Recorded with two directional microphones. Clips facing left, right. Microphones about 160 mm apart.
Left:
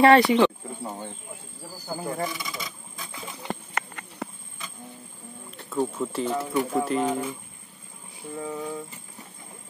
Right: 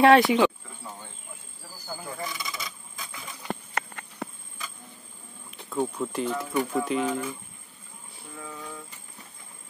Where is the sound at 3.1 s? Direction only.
30° left (ahead or behind).